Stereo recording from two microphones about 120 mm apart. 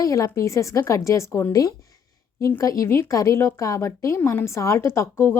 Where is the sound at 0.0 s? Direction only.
30° left (ahead or behind).